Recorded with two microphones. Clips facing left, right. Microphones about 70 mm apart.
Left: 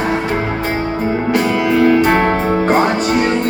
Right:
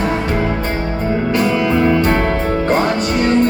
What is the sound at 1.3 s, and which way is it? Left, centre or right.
Music, left.